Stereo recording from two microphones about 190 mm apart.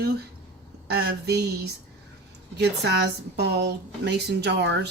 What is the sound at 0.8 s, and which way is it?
Speech, 60° right (ahead or behind).